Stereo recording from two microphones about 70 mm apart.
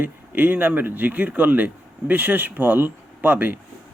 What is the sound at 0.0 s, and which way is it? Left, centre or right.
Speech, right.